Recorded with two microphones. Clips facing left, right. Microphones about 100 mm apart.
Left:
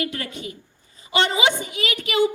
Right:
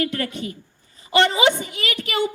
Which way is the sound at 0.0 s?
45° right (ahead or behind).